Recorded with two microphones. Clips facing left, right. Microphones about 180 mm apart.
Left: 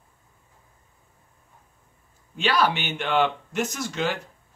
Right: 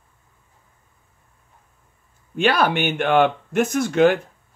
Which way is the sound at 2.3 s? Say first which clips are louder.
Right 4 dB; 55° right (ahead or behind).